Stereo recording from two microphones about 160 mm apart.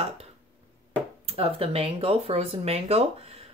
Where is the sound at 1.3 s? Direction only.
40° right (ahead or behind).